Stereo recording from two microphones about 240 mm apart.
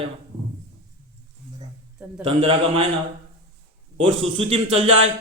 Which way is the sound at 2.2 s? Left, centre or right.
Right.